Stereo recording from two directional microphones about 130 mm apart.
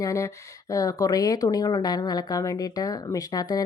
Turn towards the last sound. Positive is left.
turn(degrees=30)  # may be behind; listen again after turning